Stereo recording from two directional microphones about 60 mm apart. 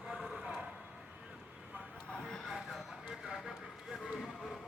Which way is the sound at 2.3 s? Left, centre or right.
Centre.